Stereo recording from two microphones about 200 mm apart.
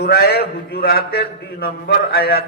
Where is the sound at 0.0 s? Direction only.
50° left (ahead or behind).